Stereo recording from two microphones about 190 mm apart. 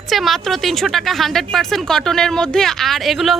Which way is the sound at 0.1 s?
Centre (ahead or behind).